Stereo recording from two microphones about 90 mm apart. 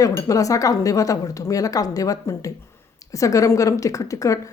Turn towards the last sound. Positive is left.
turn(degrees=35)  # may be behind; listen again after turning